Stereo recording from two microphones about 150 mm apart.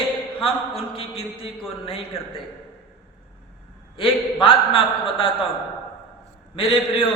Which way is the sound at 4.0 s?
35° left (ahead or behind).